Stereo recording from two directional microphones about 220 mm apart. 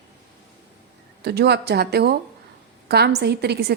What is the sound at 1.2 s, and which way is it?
Speech, 45° right (ahead or behind).